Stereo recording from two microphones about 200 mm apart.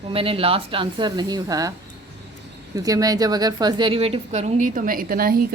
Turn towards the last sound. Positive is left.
turn(degrees=-45)  # may be behind; listen again after turning